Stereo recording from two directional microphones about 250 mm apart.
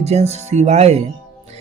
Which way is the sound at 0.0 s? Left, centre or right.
Right.